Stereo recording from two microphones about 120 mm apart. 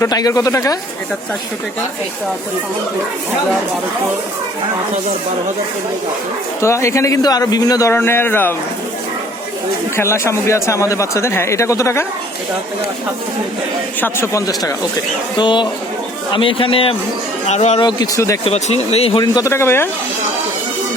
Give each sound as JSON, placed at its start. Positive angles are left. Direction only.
{"t": 0.0, "sound": "speech", "side_deg": 30}
{"t": 6.6, "sound": "speech", "side_deg": 25}
{"t": 9.9, "sound": "speech", "side_deg": 20}
{"t": 14.0, "sound": "speech", "side_deg": 20}
{"t": 15.4, "sound": "a man's voice", "side_deg": 40}
{"t": 17.4, "sound": "speech", "side_deg": 70}
{"t": 17.7, "sound": "speech", "side_deg": 35}
{"t": 18.4, "sound": "speech", "side_deg": 60}
{"t": 19.2, "sound": "speech", "side_deg": 30}